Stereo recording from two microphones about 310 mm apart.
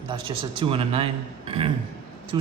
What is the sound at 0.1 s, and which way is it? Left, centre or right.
A man's voice, centre.